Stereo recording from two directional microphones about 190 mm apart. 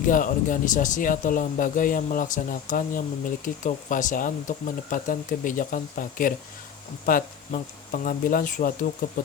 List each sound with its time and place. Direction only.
0.0 s speech: 45° left (ahead or behind)